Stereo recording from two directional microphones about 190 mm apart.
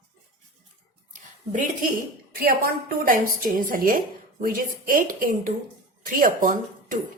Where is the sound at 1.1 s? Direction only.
45° right (ahead or behind).